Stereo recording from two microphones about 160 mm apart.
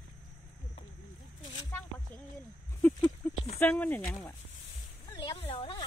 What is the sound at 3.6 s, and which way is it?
Speech, 10° left (ahead or behind).